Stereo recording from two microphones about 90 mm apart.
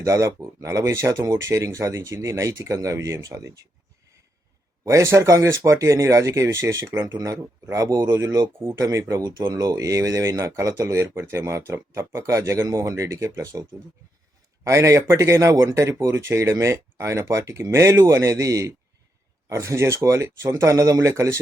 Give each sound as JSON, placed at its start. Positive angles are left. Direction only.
{"t": 0.0, "sound": "speech", "side_deg": -35}
{"t": 4.9, "sound": "speech", "side_deg": -35}